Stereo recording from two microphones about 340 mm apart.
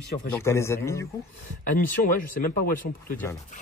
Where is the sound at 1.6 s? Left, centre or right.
Left.